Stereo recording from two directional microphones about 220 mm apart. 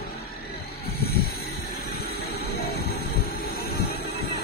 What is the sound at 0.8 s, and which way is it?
Vehicle, 45° left (ahead or behind).